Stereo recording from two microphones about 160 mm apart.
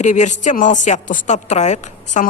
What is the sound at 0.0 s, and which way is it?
Speech, 50° left (ahead or behind).